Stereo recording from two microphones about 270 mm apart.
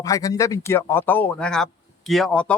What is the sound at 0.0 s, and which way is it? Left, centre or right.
Speech, centre.